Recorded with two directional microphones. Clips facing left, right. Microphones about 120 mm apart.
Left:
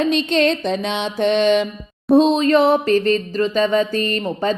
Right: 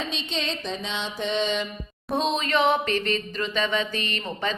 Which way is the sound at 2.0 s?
35° left (ahead or behind).